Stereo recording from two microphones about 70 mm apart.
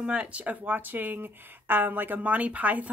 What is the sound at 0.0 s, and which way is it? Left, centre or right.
Speech, centre.